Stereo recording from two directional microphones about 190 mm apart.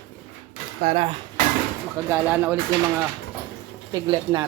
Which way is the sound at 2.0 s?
10° right (ahead or behind).